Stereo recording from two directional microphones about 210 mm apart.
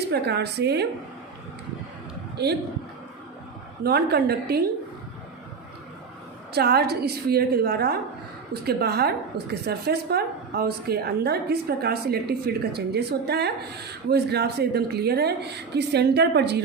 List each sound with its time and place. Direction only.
0.0 s a woman's voice: 50° right (ahead or behind)
2.3 s a woman's voice: 50° right (ahead or behind)
3.8 s a woman's voice: 50° right (ahead or behind)
6.5 s a woman's voice: 50° right (ahead or behind)